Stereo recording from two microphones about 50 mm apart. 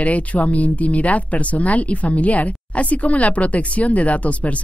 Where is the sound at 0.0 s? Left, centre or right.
Left.